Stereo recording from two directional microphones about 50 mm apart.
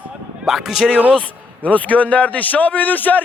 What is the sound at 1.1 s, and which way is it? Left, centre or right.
A man's voice, left.